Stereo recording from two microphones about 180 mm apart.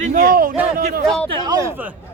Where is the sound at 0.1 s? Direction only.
55° right (ahead or behind).